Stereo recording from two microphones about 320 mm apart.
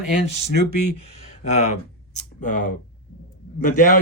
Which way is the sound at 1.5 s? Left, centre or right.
Left.